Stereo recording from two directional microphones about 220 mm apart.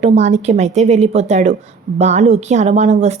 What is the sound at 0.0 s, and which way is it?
Speech, 30° right (ahead or behind).